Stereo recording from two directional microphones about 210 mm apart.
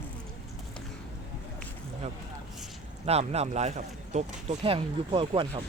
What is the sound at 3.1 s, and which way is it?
Speech, 30° right (ahead or behind).